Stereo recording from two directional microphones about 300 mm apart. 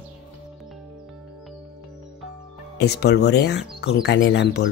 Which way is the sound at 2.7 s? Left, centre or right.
Left.